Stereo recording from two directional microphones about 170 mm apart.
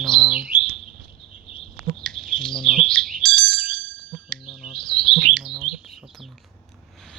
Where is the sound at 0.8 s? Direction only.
35° left (ahead or behind).